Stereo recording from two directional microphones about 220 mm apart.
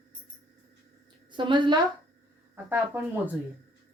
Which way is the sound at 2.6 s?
10° right (ahead or behind).